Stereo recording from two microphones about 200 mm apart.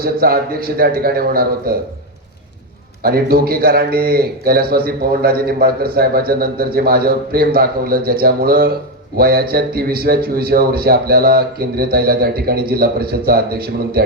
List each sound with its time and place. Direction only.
0.0 s a man's voice: 50° right (ahead or behind)
3.0 s a man's voice: 50° right (ahead or behind)